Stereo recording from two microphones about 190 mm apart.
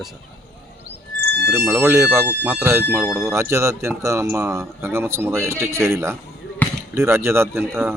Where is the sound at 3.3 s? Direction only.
15° right (ahead or behind).